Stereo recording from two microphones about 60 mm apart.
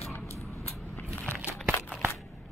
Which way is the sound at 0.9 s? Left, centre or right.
Left.